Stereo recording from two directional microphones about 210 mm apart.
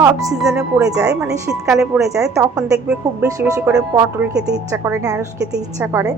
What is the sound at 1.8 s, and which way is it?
Speech, centre (ahead or behind).